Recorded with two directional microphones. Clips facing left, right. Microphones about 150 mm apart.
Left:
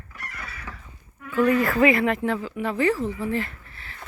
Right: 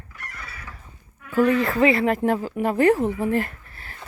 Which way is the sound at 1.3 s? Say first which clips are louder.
Right 2 dB; 40° right (ahead or behind).